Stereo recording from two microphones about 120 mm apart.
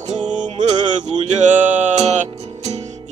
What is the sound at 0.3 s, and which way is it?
Music, 90° right.